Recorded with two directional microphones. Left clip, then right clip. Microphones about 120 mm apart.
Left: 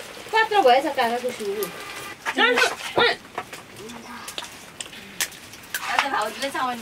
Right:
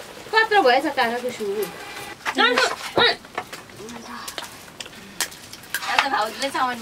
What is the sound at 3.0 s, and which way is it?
Bird, 25° right (ahead or behind).